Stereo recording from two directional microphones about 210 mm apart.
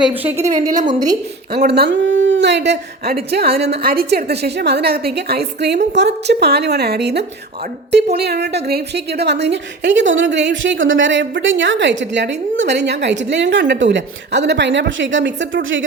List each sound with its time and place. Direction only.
0.1 s a woman's voice: 10° right (ahead or behind)
0.3 s a woman's voice: 30° right (ahead or behind)
0.9 s a woman's voice: 20° right (ahead or behind)
1.5 s a woman's voice: 50° right (ahead or behind)